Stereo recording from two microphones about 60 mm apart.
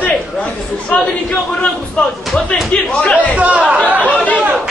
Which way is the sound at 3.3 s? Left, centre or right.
Right.